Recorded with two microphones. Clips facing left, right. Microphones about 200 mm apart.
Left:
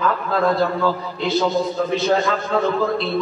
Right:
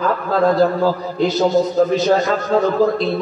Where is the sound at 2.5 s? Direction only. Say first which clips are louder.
Right 5 dB; 40° right (ahead or behind).